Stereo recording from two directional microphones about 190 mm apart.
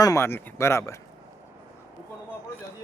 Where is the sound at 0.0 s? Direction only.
15° left (ahead or behind).